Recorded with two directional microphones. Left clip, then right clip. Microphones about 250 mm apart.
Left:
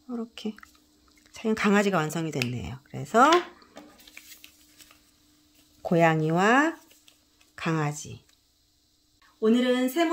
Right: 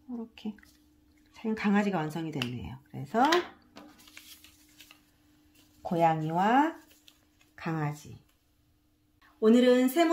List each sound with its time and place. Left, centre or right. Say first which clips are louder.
0.1 s speech: left 6 dB; left
5.9 s speech: left 4 dB; left
9.4 s a sound: right 1 dB; centre